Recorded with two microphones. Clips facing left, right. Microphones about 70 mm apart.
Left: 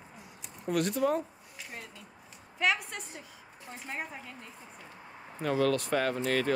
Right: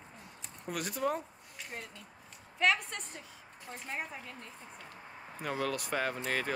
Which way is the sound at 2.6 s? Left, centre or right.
Centre.